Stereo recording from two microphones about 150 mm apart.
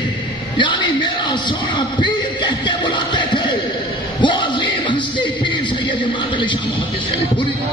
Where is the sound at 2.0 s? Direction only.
30° left (ahead or behind).